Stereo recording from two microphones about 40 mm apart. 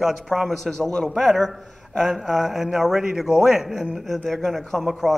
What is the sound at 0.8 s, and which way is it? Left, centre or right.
A man's voice, centre.